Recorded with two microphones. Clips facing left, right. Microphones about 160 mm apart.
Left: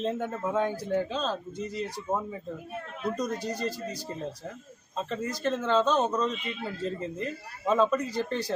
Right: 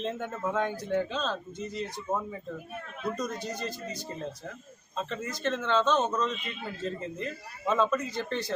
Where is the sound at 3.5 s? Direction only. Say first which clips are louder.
Left 4 dB; 35° left (ahead or behind).